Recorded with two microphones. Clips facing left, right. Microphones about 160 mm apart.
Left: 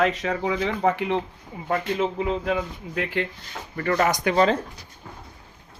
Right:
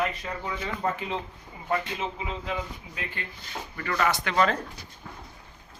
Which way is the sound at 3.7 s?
40° left (ahead or behind).